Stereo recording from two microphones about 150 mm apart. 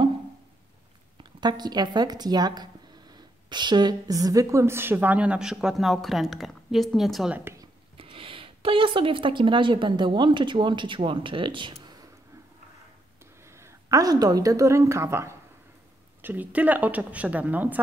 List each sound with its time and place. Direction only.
1.4 s speech: 30° right (ahead or behind); by 7.3 s centre (ahead or behind)
7.3 s speech: 15° right (ahead or behind)
8.0 s speech: 35° right (ahead or behind)
13.5 s a woman's voice: 20° right (ahead or behind)